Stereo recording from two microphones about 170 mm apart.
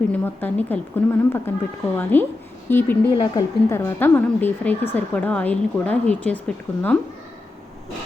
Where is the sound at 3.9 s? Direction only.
10° left (ahead or behind).